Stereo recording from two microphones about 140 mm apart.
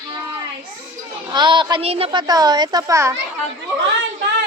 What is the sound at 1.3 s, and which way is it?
A woman's voice, 35° right (ahead or behind).